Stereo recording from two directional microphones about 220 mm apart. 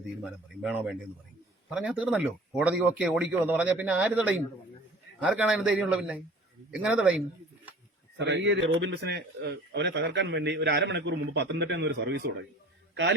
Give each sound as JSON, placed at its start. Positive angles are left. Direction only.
{"t": 0.2, "sound": "a man's voice", "side_deg": -5}
{"t": 8.2, "sound": "a man's voice", "side_deg": -55}